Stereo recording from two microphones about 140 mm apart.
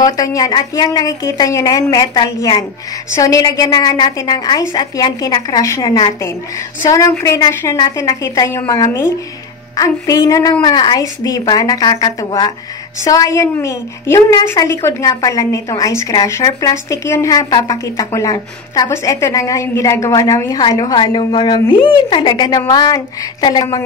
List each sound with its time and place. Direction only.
0.0 s a woman's voice: 25° left (ahead or behind)